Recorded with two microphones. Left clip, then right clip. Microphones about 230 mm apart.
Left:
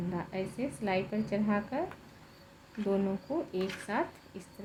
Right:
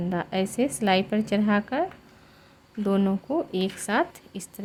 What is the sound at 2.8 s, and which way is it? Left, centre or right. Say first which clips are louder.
Speech: right 6 dB; right.